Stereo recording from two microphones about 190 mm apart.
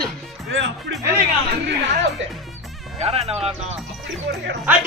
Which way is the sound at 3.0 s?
30° right (ahead or behind).